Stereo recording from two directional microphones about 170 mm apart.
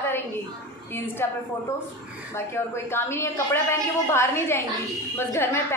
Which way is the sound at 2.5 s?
15° left (ahead or behind).